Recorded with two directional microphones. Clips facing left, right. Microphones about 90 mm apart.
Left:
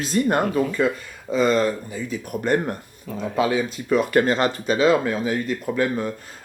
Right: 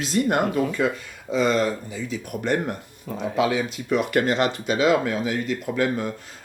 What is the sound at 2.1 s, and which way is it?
Speech, 40° left (ahead or behind).